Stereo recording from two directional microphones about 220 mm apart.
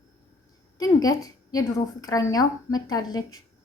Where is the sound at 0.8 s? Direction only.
15° left (ahead or behind).